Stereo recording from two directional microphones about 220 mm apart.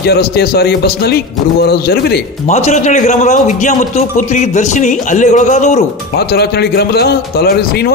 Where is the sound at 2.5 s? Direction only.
30° left (ahead or behind).